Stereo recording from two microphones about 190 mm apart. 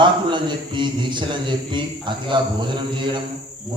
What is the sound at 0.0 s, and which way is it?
A man's voice, 25° right (ahead or behind).